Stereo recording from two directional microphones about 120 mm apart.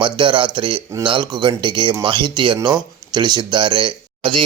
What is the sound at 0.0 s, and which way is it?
Speech, 45° right (ahead or behind).